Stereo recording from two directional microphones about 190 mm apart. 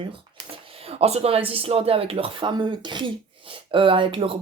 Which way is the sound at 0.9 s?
30° right (ahead or behind).